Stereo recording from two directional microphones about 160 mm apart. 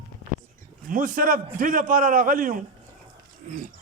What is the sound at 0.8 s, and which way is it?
A man's voice, 55° right (ahead or behind).